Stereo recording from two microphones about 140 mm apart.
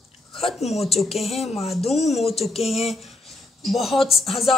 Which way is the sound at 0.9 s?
Centre (ahead or behind).